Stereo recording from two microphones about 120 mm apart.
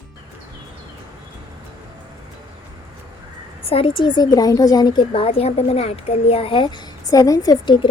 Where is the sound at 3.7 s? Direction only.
45° left (ahead or behind).